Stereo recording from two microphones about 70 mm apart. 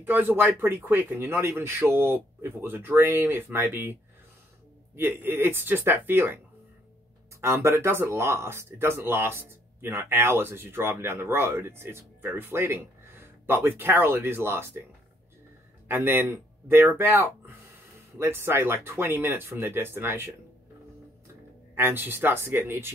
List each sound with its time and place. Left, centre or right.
0.0 s speech: right
7.4 s speech: right
15.9 s speech: right
21.7 s speech: right